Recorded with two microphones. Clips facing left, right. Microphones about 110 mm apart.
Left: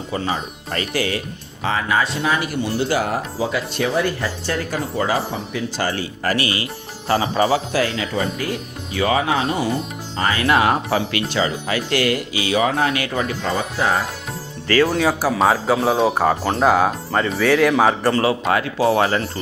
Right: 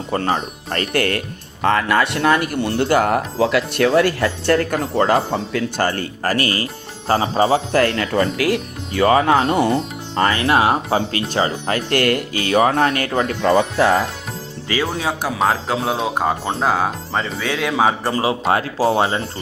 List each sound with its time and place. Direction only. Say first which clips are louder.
0.1 s speech: right 4 dB; 55° right (ahead or behind)
7.1 s speech: right 2 dB; 35° right (ahead or behind)
7.7 s speech: right 4 dB; 55° right (ahead or behind); by 8.6 s 85° right
8.9 s speech: right 5 dB; 45° right (ahead or behind)
10.3 s speech: left 2 dB; 30° right (ahead or behind); by 13.9 s 75° right (ahead or behind)
15.2 s a man's voice: left 2 dB; centre (ahead or behind)
18.1 s speech: left 1 dB; 20° right (ahead or behind)
18.4 s speech: right 1 dB; 30° right (ahead or behind)